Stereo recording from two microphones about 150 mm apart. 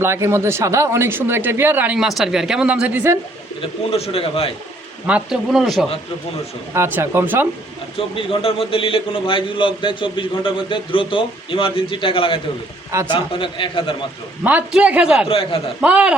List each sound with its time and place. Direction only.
0.0 s speech: 15° right (ahead or behind)
3.8 s a man's voice: 40° left (ahead or behind)
5.0 s speech: 5° right (ahead or behind)
6.7 s speech: 15° right (ahead or behind)
7.9 s a man's voice: 35° left (ahead or behind)
14.4 s speech: 10° right (ahead or behind)
15.3 s a man's voice: 40° left (ahead or behind)
15.8 s speech: 10° right (ahead or behind)